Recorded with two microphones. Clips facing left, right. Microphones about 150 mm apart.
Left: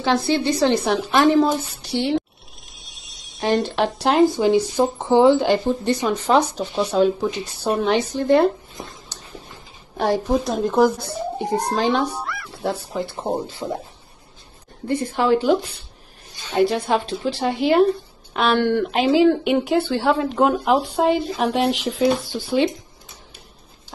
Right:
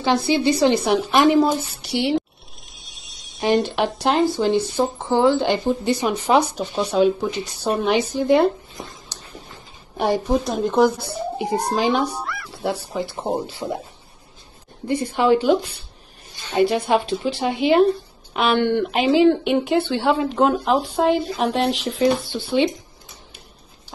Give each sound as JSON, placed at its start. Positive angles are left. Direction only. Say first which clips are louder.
{"t": 0.0, "sound": "a woman's voice", "louder": "right 1 dB", "side_deg": -5}
{"t": 2.8, "sound": "a sound", "louder": "even", "side_deg": 0}
{"t": 4.4, "sound": "speech", "louder": "left 2 dB", "side_deg": 5}
{"t": 4.9, "sound": "speech", "louder": "left 4 dB", "side_deg": 20}
{"t": 5.4, "sound": "speech", "louder": "left 1 dB", "side_deg": 0}
{"t": 14.9, "sound": "speech", "louder": "right 1 dB", "side_deg": 0}